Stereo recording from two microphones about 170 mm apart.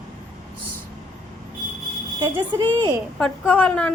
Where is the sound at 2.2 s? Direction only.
25° right (ahead or behind).